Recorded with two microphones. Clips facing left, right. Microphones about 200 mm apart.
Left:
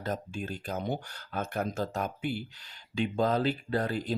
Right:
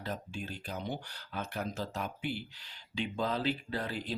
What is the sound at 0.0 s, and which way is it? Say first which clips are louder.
Speech: left 5 dB; 45° left (ahead or behind).